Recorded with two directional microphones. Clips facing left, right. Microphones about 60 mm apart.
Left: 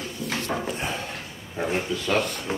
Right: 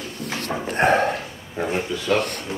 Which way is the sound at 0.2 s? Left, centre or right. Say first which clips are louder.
Even; right.